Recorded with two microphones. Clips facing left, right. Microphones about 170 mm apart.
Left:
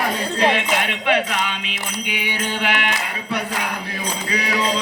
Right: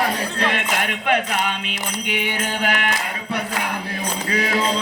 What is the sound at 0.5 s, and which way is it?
Music, 50° right (ahead or behind).